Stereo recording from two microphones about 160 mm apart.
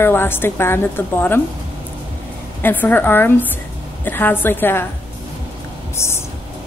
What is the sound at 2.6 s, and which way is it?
A woman's voice, 10° left (ahead or behind).